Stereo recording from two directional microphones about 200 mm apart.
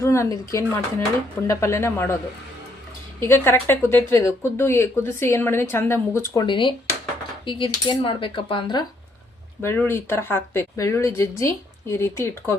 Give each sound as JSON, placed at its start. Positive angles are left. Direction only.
{"t": 0.0, "sound": "speech", "side_deg": 15}
{"t": 3.2, "sound": "speech", "side_deg": 10}
{"t": 7.4, "sound": "cutlery", "side_deg": 25}
{"t": 9.6, "sound": "speech", "side_deg": 10}